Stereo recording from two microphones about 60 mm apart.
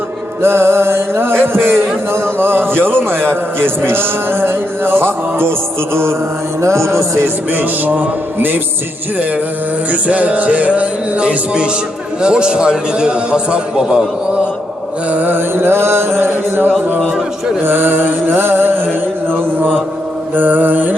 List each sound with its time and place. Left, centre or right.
0.4 s music: right
7.5 s music: right
9.9 s music: right
12.2 s a man's voice: centre
15.1 s music: right
15.4 s music: right
20.3 s music: right